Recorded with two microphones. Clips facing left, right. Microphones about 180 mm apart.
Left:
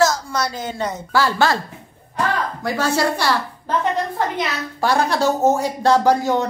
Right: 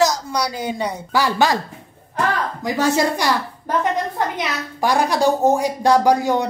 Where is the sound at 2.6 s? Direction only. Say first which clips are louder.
Right 2 dB; 15° right (ahead or behind).